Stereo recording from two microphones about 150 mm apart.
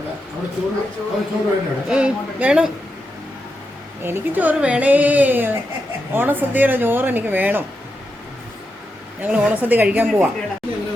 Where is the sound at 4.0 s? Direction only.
15° right (ahead or behind).